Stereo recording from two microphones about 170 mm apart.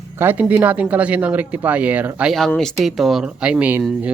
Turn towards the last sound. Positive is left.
turn(degrees=-10)  # may be behind; listen again after turning